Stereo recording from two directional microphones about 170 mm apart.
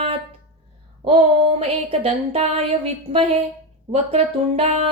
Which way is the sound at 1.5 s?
35° right (ahead or behind).